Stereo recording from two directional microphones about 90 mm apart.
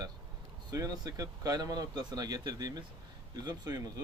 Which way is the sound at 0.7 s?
45° right (ahead or behind).